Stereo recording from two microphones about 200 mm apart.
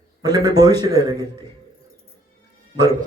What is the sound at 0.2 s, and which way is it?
A man's voice, 20° right (ahead or behind).